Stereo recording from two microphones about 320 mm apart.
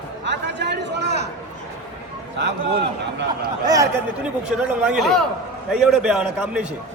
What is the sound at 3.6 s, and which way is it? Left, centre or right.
A man's voice, centre.